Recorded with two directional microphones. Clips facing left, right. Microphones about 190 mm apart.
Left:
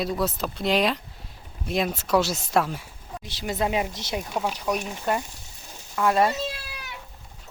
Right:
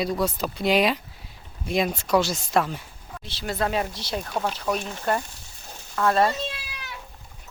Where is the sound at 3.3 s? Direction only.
15° left (ahead or behind).